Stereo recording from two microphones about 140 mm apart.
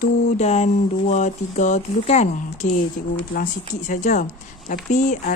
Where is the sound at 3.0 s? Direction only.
75° left (ahead or behind).